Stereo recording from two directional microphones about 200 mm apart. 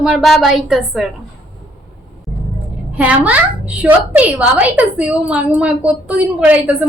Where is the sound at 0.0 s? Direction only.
Centre (ahead or behind).